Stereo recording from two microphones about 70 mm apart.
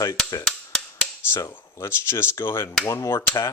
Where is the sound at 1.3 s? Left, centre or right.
Left.